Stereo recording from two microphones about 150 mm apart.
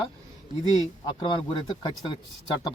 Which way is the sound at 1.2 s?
30° left (ahead or behind).